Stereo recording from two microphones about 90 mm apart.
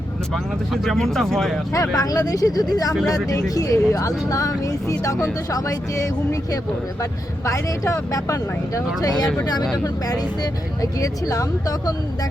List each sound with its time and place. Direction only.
0.7 s speech: 5° left (ahead or behind)
1.7 s speech: 40° left (ahead or behind)